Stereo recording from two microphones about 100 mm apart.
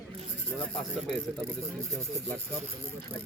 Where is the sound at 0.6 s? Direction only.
10° left (ahead or behind).